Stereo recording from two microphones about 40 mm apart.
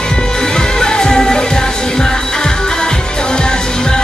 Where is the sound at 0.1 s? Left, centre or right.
Centre.